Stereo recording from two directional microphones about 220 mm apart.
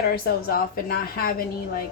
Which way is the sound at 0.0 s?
45° left (ahead or behind).